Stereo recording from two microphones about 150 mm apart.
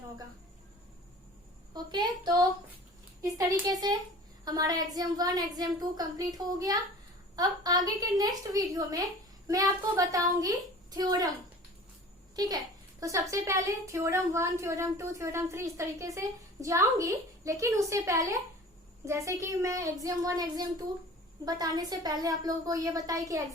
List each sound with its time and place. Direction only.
1.7 s a woman's voice: 30° right (ahead or behind)
13.0 s a woman's voice: 20° right (ahead or behind)